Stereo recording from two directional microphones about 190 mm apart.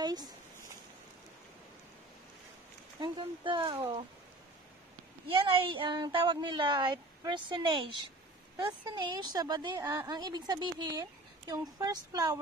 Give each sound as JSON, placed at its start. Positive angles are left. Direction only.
{"t": 0.0, "sound": "a sound", "side_deg": -20}
{"t": 3.0, "sound": "speech", "side_deg": -25}
{"t": 5.5, "sound": "a woman's voice", "side_deg": -25}